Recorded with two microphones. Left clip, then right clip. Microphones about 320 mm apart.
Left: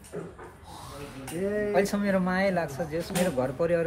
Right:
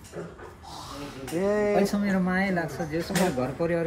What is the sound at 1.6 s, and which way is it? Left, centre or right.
Speech, centre.